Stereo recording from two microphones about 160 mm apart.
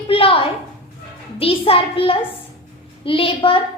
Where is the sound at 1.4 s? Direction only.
35° left (ahead or behind).